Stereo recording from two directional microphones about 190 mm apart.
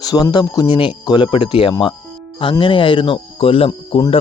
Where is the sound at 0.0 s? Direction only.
20° left (ahead or behind).